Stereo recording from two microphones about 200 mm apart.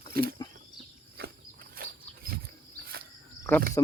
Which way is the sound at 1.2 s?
45° right (ahead or behind).